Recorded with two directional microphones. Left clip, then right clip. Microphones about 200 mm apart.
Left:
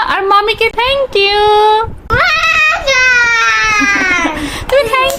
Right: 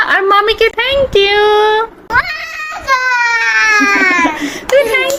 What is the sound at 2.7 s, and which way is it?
Baby cry, 15° left (ahead or behind).